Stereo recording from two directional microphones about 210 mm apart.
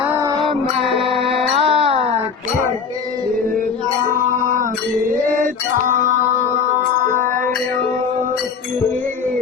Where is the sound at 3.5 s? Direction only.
40° right (ahead or behind).